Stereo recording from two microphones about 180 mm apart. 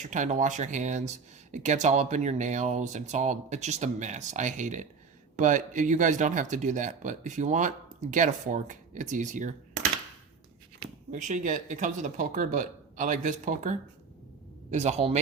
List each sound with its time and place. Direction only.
0.0 s speech: 40° right (ahead or behind)
11.1 s speech: 45° right (ahead or behind)